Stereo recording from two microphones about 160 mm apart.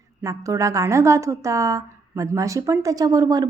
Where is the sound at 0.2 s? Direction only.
20° right (ahead or behind).